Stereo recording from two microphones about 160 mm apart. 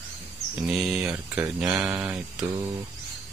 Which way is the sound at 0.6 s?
5° right (ahead or behind).